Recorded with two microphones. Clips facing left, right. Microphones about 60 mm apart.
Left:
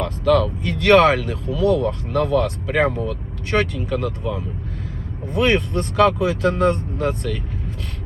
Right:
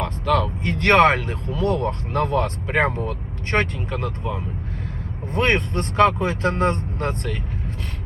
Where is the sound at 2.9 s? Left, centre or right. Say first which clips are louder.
Left 2 dB; right.